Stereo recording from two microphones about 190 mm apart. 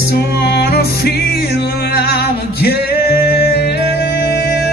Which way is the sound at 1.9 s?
55° left (ahead or behind).